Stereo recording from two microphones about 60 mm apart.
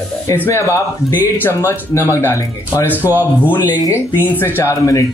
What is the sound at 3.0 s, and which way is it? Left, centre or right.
Speech, right.